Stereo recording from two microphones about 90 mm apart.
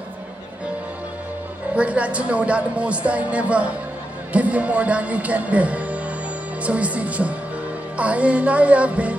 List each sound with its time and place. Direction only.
1.8 s a woman's voice: 15° right (ahead or behind)